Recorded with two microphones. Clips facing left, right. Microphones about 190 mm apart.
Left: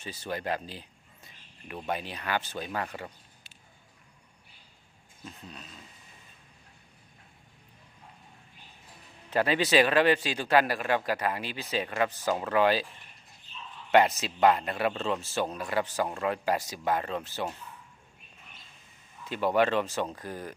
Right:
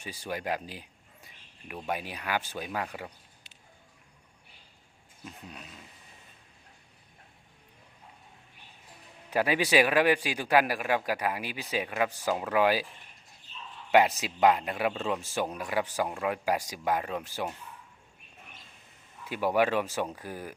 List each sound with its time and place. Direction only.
0.0 s speech: 10° right (ahead or behind)
5.2 s speech: 10° right (ahead or behind)
9.3 s speech: 10° right (ahead or behind)
14.2 s speech: 10° right (ahead or behind)
19.2 s speech: 10° right (ahead or behind)